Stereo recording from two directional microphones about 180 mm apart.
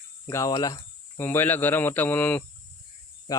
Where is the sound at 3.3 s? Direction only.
20° left (ahead or behind).